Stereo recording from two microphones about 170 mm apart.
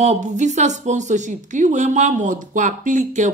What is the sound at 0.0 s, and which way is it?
A woman's voice, 45° right (ahead or behind).